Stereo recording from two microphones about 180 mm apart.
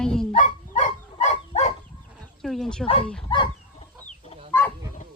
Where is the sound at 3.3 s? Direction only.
30° left (ahead or behind).